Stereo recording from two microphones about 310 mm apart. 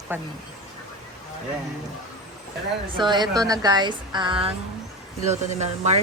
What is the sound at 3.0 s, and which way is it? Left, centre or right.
Speech, centre.